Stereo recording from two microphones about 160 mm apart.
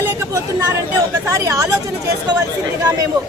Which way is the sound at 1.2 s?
20° right (ahead or behind).